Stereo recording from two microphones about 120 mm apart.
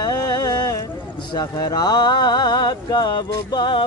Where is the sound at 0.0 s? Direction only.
30° left (ahead or behind).